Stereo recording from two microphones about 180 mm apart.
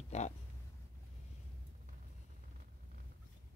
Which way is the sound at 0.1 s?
40° left (ahead or behind).